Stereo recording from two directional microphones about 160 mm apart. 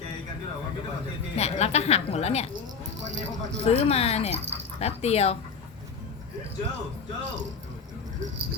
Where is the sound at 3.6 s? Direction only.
40° left (ahead or behind).